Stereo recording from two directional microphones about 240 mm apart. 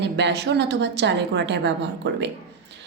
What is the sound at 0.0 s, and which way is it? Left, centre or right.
A woman's voice, right.